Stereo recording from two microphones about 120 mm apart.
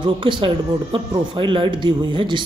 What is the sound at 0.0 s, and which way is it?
Speech, 45° right (ahead or behind).